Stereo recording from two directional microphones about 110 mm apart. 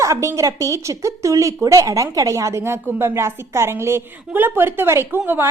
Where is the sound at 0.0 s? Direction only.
30° right (ahead or behind).